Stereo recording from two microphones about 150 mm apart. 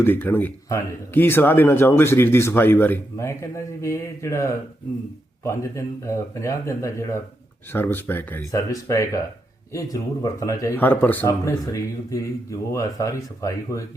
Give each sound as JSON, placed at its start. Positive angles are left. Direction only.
{"t": 0.0, "sound": "speech", "side_deg": 15}